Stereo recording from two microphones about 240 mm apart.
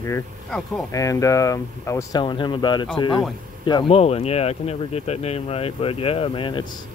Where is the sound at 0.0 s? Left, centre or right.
Centre.